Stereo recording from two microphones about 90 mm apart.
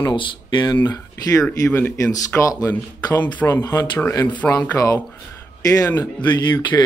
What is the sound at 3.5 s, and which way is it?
Speech, 30° left (ahead or behind).